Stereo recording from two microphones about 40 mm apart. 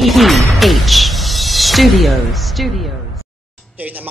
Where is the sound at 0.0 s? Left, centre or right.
Centre.